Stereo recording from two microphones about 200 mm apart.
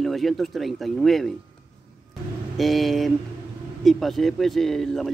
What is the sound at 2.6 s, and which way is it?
Speech, centre (ahead or behind).